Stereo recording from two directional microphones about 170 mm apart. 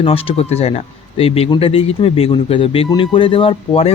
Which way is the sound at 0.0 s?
35° left (ahead or behind).